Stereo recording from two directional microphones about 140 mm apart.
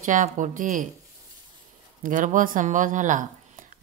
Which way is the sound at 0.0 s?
65° right (ahead or behind).